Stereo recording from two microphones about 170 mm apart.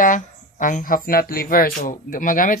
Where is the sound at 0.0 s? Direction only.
50° left (ahead or behind).